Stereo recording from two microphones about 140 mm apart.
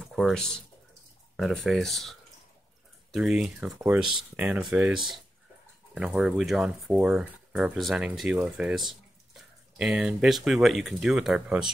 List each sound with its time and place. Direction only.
0.0 s speech: centre (ahead or behind)